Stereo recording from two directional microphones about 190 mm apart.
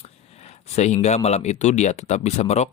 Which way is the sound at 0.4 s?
35° left (ahead or behind).